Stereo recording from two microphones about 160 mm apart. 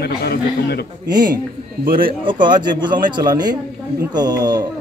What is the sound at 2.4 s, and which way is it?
Speech, 30° right (ahead or behind).